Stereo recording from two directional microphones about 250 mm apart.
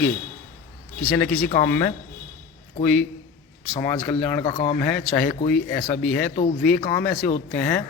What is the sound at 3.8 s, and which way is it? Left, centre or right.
Speech, centre.